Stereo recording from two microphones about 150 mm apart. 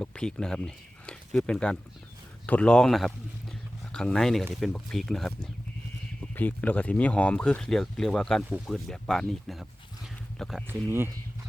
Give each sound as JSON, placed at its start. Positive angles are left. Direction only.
{"t": 0.0, "sound": "speech", "side_deg": 5}
{"t": 10.8, "sound": "speech", "side_deg": -15}